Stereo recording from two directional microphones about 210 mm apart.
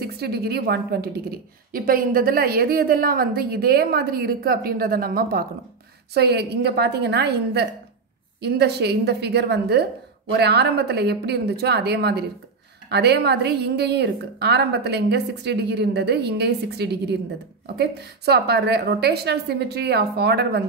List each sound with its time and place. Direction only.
0.0 s a woman's voice: 50° right (ahead or behind)